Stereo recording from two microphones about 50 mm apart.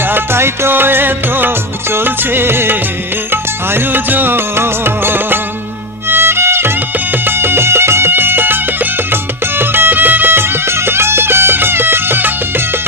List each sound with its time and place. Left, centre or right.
0.0 s music: right